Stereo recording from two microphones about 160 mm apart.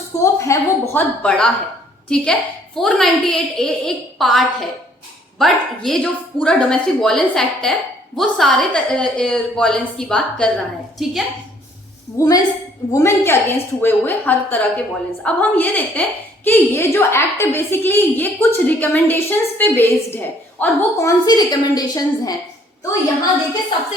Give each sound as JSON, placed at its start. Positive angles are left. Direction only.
{"t": 0.2, "sound": "a woman's voice", "side_deg": 20}
{"t": 12.1, "sound": "a woman's voice", "side_deg": 20}